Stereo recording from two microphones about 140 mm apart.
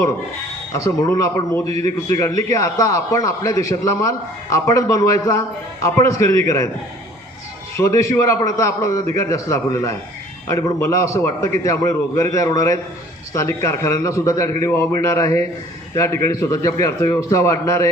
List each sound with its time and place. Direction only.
0.7 s a man's voice: 20° left (ahead or behind)
1.6 s a man's voice: 50° right (ahead or behind)
2.0 s a man's voice: 20° left (ahead or behind)
7.8 s a man's voice: 20° left (ahead or behind)